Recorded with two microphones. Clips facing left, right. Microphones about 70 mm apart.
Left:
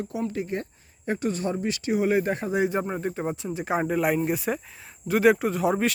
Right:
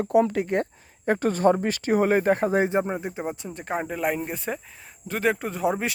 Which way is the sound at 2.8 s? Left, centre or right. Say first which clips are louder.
Left 1 dB; centre.